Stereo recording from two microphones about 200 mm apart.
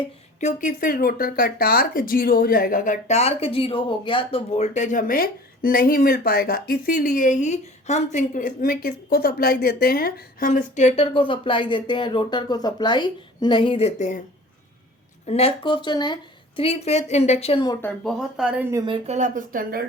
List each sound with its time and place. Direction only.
0.0 s speech: 35° left (ahead or behind)
15.3 s speech: 30° left (ahead or behind)
17.8 s speech: centre (ahead or behind); by 19.9 s 45° right (ahead or behind)